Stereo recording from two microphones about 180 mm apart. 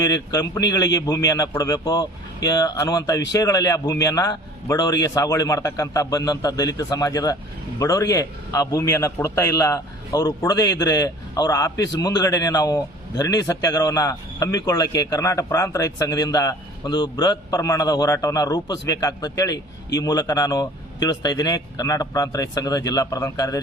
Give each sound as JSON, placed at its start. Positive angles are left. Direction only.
{"t": 0.0, "sound": "a man's voice", "side_deg": 20}